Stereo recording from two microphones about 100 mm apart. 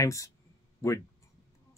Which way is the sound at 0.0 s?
30° left (ahead or behind).